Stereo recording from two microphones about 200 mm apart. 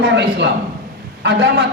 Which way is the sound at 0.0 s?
60° right (ahead or behind).